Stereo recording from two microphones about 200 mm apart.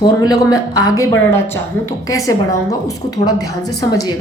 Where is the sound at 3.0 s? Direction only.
20° left (ahead or behind).